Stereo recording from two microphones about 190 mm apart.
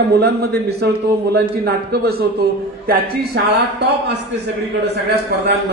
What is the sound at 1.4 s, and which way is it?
A man's voice, 55° right (ahead or behind).